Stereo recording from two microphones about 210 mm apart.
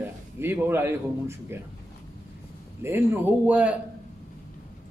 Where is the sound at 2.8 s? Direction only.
10° right (ahead or behind).